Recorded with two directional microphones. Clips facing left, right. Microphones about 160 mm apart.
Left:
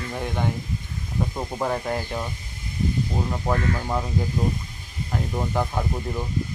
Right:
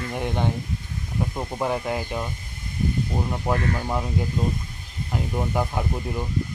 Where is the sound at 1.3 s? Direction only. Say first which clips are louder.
Right 1 dB; 5° right (ahead or behind).